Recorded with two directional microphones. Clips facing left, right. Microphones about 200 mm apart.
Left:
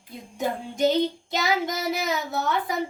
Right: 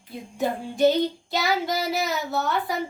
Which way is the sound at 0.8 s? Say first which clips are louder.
Right 2 dB; 20° left (ahead or behind).